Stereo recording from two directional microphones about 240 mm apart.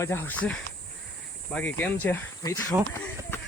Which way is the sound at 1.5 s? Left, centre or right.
Centre.